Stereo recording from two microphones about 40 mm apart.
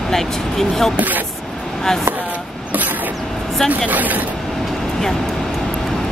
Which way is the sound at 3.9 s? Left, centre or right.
Right.